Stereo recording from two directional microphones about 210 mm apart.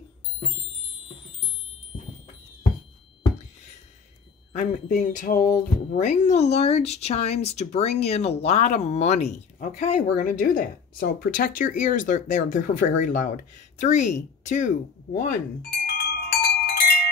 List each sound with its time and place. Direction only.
4.5 s speech: 35° left (ahead or behind)
15.8 s wind chime: 45° left (ahead or behind)